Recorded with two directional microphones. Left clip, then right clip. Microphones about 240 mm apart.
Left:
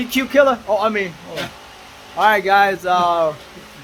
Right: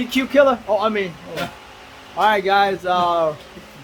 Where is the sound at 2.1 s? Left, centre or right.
Centre.